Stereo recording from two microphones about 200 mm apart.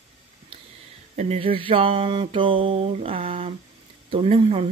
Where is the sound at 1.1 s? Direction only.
35° right (ahead or behind).